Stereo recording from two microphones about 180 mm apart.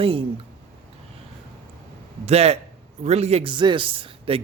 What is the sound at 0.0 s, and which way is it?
Speech, 30° right (ahead or behind).